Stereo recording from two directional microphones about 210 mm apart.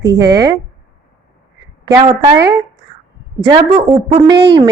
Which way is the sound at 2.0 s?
20° right (ahead or behind).